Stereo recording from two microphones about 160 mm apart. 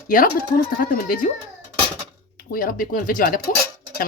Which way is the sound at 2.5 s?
60° left (ahead or behind).